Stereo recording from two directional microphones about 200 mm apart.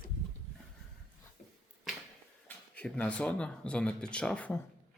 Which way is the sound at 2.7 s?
5° left (ahead or behind).